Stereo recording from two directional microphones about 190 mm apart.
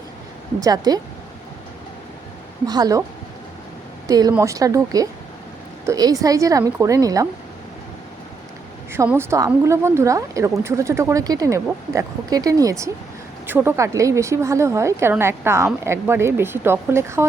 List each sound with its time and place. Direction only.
0.6 s speech: 20° right (ahead or behind)
2.6 s speech: 20° right (ahead or behind)
4.1 s a woman's voice: 20° right (ahead or behind)
8.9 s a woman's voice: 15° right (ahead or behind)